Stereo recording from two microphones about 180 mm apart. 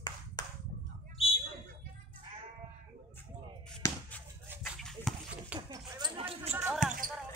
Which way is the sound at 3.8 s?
15° left (ahead or behind).